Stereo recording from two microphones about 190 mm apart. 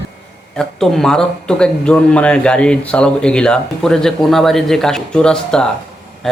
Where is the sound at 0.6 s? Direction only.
Centre (ahead or behind).